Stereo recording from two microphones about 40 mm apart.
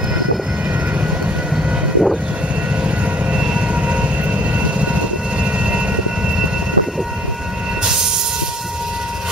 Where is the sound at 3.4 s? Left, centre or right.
Right.